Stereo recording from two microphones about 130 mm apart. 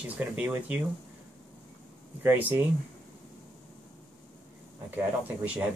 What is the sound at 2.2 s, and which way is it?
Speech, 20° right (ahead or behind).